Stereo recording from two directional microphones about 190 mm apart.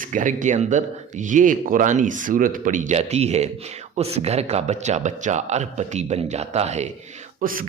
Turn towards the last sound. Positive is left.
turn(degrees=-45)  # may be behind; listen again after turning